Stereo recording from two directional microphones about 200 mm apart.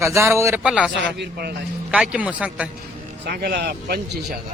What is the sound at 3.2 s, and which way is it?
Speech, 55° right (ahead or behind).